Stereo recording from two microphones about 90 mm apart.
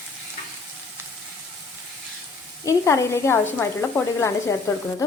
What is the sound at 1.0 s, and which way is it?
Frying, 20° right (ahead or behind).